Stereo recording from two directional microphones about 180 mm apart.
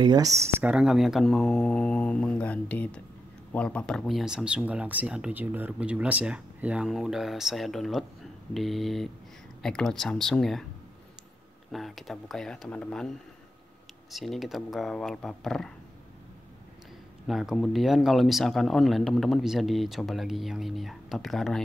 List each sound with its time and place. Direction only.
0.0 s speech: 20° right (ahead or behind)
0.4 s speech: 10° right (ahead or behind)
11.7 s speech: centre (ahead or behind)
14.1 s speech: centre (ahead or behind)
17.3 s speech: centre (ahead or behind)